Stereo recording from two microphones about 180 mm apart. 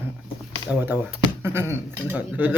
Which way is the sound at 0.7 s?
10° right (ahead or behind).